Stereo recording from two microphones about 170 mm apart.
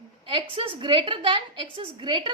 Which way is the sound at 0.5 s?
30° right (ahead or behind).